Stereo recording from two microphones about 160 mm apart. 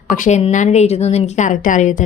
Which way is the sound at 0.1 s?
45° left (ahead or behind).